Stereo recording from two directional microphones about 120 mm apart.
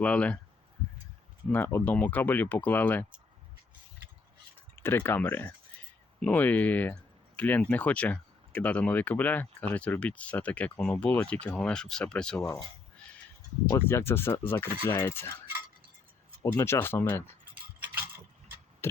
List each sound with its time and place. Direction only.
0.0 s speech: 10° left (ahead or behind)
1.5 s speech: 15° left (ahead or behind)
4.8 s speech: 20° left (ahead or behind)
13.7 s speech: 20° left (ahead or behind)
16.5 s speech: 20° left (ahead or behind)